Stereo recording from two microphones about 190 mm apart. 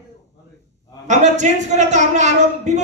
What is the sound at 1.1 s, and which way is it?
A man's voice, 40° right (ahead or behind).